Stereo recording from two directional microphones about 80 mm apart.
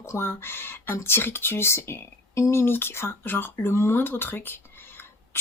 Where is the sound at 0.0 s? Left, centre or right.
Left.